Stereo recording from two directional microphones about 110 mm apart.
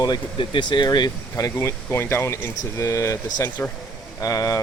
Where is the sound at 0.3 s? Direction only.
45° left (ahead or behind).